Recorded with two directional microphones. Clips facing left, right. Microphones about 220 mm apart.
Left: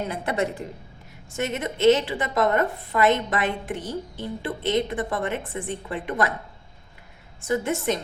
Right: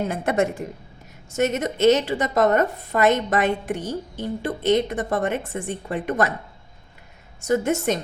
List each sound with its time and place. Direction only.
0.1 s a woman's voice: 45° right (ahead or behind)
7.4 s a woman's voice: 45° right (ahead or behind)